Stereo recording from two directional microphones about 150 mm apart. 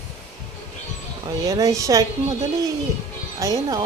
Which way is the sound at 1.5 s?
20° right (ahead or behind).